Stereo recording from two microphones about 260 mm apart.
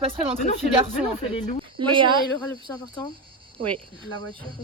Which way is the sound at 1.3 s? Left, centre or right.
Left.